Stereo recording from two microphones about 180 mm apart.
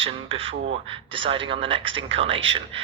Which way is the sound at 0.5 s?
90° right.